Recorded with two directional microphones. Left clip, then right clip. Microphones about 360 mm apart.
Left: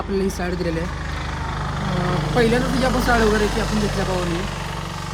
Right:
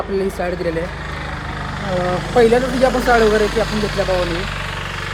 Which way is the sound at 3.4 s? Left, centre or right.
Left.